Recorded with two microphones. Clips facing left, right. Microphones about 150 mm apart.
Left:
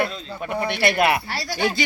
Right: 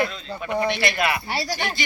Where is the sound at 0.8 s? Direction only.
55° left (ahead or behind).